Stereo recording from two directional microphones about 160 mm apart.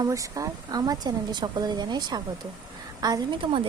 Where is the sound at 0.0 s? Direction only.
20° right (ahead or behind).